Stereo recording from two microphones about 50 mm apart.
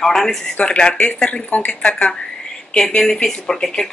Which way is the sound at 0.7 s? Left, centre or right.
Centre.